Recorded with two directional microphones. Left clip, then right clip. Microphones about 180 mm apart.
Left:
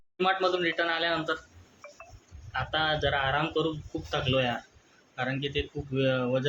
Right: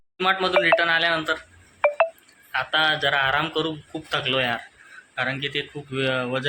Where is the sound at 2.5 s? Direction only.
Centre (ahead or behind).